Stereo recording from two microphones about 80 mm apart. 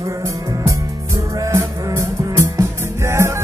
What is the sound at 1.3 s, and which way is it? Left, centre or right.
Music, right.